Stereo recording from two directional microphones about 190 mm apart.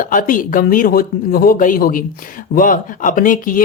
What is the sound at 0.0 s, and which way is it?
Speech, 45° left (ahead or behind).